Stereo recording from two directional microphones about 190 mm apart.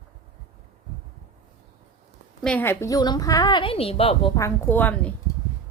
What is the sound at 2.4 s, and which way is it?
A woman's voice, 5° left (ahead or behind).